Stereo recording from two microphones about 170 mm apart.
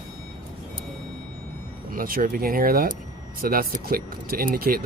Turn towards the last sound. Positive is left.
turn(degrees=-60)  # may be behind; listen again after turning